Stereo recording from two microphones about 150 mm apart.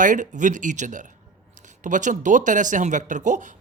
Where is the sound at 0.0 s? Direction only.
55° right (ahead or behind).